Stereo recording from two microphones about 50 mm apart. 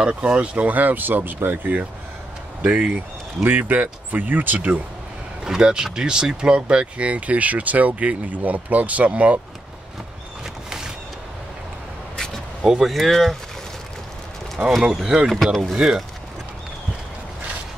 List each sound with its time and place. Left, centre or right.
0.0 s speech: right
2.6 s speech: right
3.4 s speech: right
5.4 s speech: centre
10.4 s a sound: centre
12.8 s speech: centre
14.8 s speech: centre
15.2 s speech: centre